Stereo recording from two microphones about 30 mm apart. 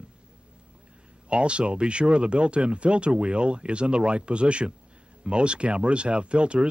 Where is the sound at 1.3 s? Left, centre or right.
Right.